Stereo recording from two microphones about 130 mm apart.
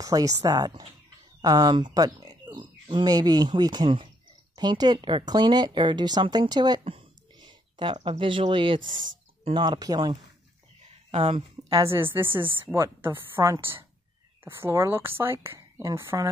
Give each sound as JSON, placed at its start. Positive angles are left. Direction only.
{"t": 0.0, "sound": "a woman's voice", "side_deg": -25}
{"t": 6.8, "sound": "speech", "side_deg": -45}
{"t": 10.9, "sound": "a sound", "side_deg": -50}
{"t": 11.9, "sound": "a woman's voice", "side_deg": -15}